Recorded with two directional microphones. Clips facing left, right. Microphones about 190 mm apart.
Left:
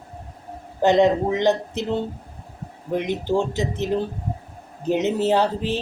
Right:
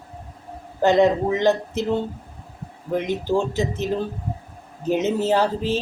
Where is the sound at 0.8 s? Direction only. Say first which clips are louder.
Even; 15° left (ahead or behind).